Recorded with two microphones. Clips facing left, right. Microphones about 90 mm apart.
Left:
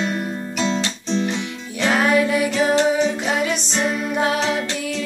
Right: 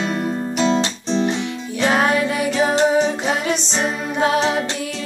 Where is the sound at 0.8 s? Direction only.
25° right (ahead or behind).